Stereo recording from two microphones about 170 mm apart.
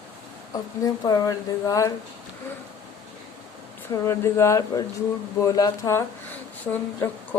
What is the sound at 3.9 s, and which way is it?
Speech, 15° left (ahead or behind).